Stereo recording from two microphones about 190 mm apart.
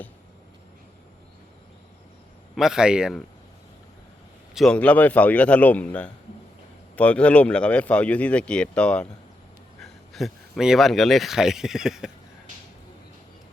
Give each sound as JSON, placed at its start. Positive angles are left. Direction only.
{"t": 2.6, "sound": "a man's voice", "side_deg": -5}
{"t": 4.5, "sound": "speech", "side_deg": 5}